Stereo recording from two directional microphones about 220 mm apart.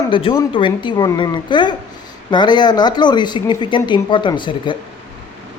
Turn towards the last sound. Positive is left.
turn(degrees=20)  # may be behind; listen again after turning